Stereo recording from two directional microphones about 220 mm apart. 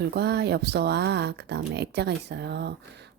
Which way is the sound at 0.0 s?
50° right (ahead or behind).